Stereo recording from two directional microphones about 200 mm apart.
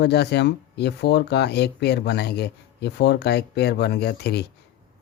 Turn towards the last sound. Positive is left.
turn(degrees=55)  # may be behind; listen again after turning